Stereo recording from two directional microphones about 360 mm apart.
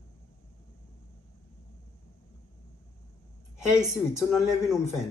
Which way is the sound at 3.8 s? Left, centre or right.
Centre.